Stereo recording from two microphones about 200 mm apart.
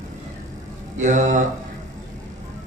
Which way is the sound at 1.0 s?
40° right (ahead or behind).